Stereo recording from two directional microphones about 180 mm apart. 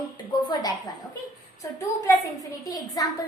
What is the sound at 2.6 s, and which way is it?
Speech, 20° left (ahead or behind).